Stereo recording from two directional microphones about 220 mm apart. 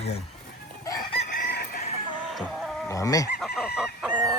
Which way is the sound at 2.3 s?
Centre (ahead or behind).